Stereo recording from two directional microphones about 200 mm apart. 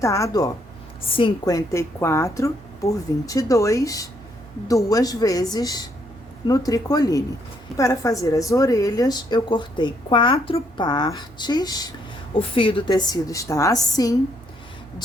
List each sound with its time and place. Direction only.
0.0 s a woman's voice: 15° left (ahead or behind)